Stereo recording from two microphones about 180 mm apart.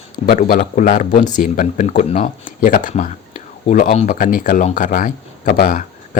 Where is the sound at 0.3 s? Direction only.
50° left (ahead or behind).